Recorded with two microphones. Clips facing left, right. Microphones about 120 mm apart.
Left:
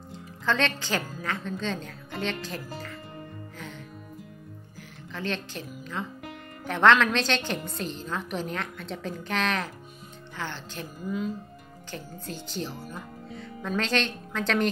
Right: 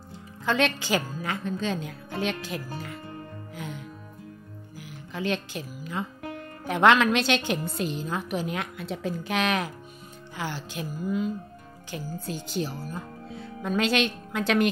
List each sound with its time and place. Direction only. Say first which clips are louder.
0.5 s a woman's voice: right 2 dB; 10° right (ahead or behind)
3.5 s music: right 6 dB; 10° right (ahead or behind)
4.7 s a woman's voice: right 4 dB; 10° right (ahead or behind)